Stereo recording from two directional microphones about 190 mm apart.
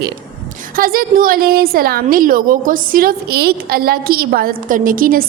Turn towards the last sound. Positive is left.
turn(degrees=-45)  # may be behind; listen again after turning